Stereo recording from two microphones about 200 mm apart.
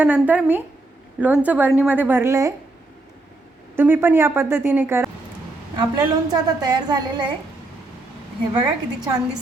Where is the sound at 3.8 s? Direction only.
10° right (ahead or behind).